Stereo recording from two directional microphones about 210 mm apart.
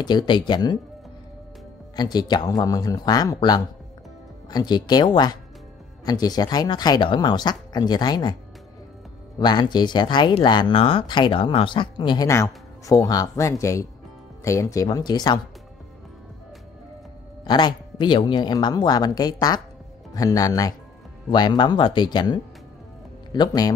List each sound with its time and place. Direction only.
0.0 s speech: 20° left (ahead or behind)
2.0 s speech: 20° left (ahead or behind)
9.4 s speech: 20° left (ahead or behind)
17.5 s speech: 20° left (ahead or behind)